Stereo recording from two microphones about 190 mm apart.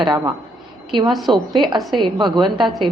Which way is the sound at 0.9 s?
25° right (ahead or behind).